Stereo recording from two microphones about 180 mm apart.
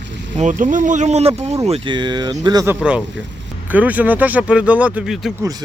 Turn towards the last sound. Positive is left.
turn(degrees=-20)  # may be behind; listen again after turning